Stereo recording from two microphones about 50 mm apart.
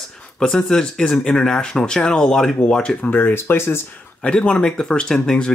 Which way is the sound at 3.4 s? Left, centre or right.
Left.